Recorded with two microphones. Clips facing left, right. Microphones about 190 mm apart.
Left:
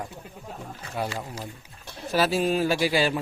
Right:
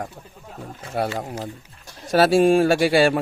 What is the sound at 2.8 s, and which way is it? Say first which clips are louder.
Speech: right 7 dB; 70° right (ahead or behind).